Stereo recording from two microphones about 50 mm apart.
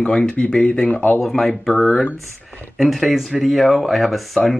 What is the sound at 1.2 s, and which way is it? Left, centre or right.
Speech, centre.